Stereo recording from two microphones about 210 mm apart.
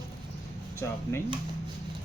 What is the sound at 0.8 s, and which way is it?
Speech, 15° left (ahead or behind).